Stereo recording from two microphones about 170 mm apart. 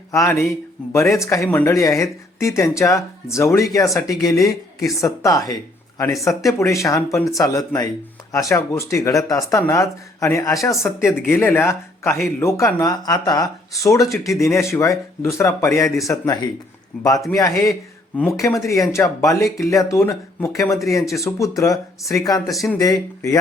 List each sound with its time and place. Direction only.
0.1 s speech: 15° left (ahead or behind)